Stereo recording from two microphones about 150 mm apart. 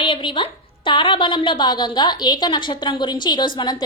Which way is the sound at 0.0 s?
35° left (ahead or behind).